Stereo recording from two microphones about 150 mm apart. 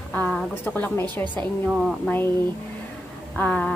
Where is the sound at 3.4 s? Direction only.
5° left (ahead or behind).